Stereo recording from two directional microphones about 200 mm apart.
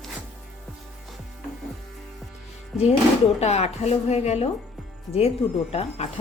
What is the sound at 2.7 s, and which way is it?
Speech, centre (ahead or behind).